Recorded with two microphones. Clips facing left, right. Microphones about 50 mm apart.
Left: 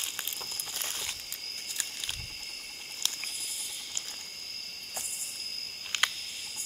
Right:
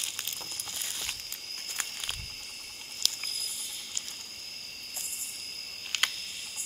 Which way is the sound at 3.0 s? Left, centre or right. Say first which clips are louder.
Right 2 dB; left.